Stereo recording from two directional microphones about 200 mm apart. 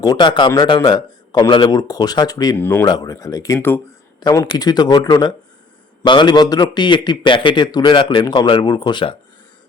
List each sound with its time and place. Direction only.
0.0 s a man's voice: 20° left (ahead or behind)